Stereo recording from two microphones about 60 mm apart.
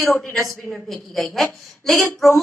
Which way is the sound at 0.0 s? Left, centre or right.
Centre.